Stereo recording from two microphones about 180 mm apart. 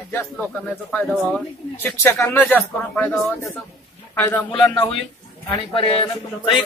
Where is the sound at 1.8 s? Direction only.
10° left (ahead or behind).